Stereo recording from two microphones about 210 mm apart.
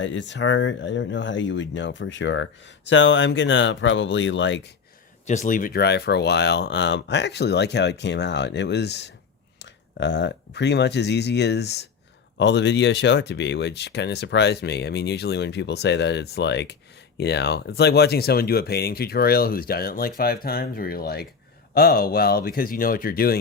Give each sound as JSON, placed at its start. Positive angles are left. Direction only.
{"t": 0.0, "sound": "speech", "side_deg": 60}
{"t": 5.2, "sound": "speech", "side_deg": 35}